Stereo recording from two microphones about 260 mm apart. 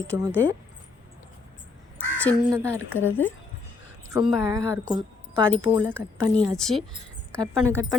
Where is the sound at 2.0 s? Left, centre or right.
Centre.